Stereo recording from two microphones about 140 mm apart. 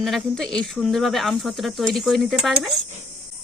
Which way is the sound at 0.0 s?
Centre (ahead or behind).